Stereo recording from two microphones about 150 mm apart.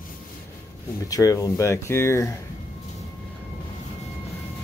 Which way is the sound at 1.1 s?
20° left (ahead or behind).